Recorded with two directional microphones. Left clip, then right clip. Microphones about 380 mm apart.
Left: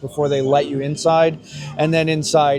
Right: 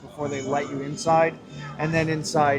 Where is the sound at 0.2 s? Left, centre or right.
Left.